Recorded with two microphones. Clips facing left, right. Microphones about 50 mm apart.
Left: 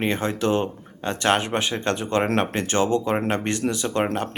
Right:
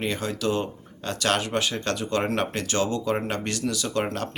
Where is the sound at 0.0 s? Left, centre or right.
Left.